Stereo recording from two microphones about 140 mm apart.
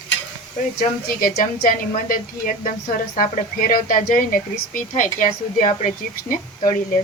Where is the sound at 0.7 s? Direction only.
90° left; by 5.7 s 75° left (ahead or behind).